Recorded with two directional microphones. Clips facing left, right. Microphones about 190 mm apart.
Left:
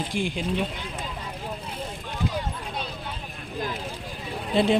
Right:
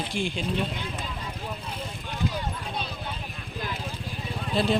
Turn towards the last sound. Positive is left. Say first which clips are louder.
# left 3 dB
turn(degrees=20)  # may be behind; listen again after turning